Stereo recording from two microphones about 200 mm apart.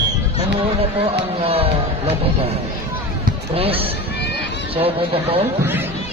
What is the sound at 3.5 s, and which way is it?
Speech, 30° right (ahead or behind).